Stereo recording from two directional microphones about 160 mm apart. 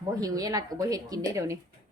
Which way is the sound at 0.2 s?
20° right (ahead or behind).